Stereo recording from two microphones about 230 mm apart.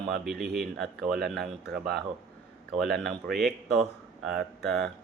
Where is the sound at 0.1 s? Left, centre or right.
Centre.